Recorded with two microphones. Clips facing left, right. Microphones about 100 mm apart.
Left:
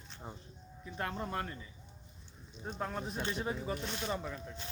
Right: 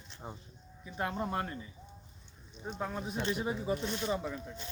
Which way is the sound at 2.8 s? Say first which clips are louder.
Right 2 dB; centre (ahead or behind).